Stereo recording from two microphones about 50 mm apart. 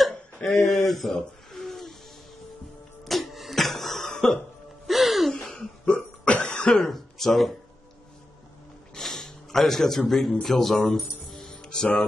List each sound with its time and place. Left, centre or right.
0.5 s speech: centre
3.1 s cough: centre
4.8 s music: centre
5.3 s laughter: centre
5.9 s hiccup: left
6.4 s cough: centre
8.9 s a sound: centre
10.4 s speech: centre